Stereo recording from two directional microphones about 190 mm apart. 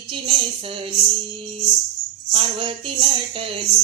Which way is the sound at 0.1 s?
30° right (ahead or behind).